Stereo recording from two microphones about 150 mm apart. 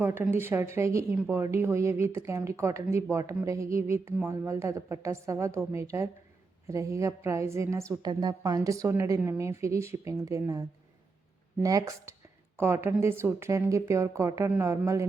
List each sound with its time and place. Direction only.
0.0 s a woman's voice: 15° right (ahead or behind)
11.6 s a woman's voice: 20° right (ahead or behind)